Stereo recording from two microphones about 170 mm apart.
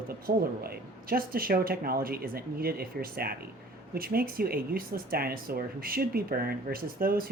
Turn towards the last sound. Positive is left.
turn(degrees=-60)  # may be behind; listen again after turning